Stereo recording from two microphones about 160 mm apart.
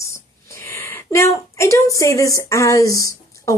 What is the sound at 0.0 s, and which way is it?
A woman's voice, 15° left (ahead or behind).